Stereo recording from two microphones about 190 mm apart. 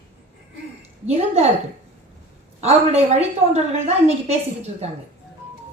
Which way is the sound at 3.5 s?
35° right (ahead or behind).